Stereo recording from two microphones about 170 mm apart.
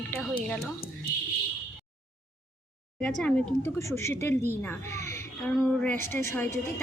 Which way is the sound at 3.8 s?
15° left (ahead or behind).